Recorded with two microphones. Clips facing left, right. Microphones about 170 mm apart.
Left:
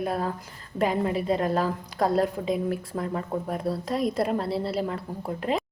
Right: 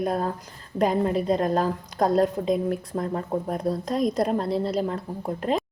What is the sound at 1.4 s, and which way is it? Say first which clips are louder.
Speech: right 2 dB; 40° right (ahead or behind).